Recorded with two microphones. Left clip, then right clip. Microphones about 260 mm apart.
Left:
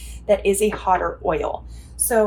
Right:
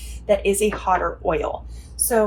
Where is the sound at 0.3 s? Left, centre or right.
Left.